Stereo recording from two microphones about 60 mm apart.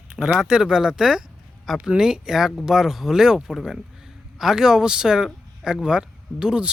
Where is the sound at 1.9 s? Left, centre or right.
Centre.